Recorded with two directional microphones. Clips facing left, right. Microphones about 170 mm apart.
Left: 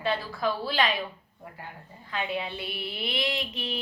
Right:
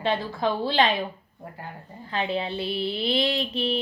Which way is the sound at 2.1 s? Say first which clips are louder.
Right 4 dB; 30° right (ahead or behind).